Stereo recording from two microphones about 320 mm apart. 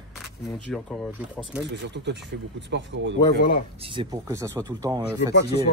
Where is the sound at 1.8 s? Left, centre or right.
Right.